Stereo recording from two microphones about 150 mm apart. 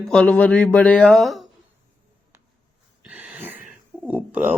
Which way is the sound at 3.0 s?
10° right (ahead or behind).